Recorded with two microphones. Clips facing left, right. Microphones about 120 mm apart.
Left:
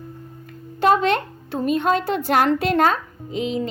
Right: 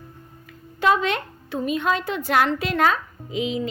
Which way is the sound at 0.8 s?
40° left (ahead or behind).